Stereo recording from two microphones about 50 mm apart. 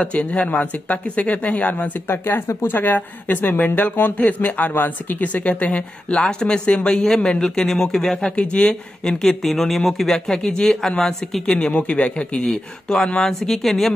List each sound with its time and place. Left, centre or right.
0.0 s speech: left
2.0 s a woman's voice: left; by 8.3 s centre
8.4 s speech: centre
11.4 s speech: centre
12.4 s speech: centre